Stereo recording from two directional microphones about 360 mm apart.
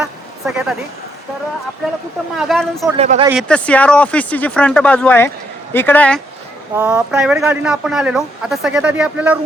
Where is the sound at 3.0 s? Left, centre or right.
Centre.